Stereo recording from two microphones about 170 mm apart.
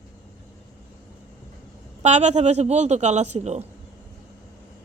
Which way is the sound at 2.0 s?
40° right (ahead or behind).